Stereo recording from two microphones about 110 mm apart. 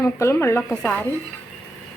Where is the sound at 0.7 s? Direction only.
10° left (ahead or behind).